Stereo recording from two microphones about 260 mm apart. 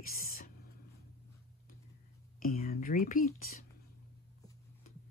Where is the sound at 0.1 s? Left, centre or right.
Left.